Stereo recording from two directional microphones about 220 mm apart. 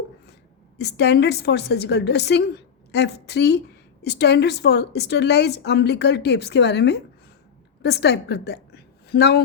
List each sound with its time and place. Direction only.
0.8 s a woman's voice: 50° left (ahead or behind)